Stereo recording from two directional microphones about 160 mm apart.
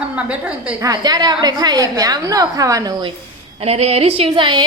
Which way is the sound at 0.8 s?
25° right (ahead or behind).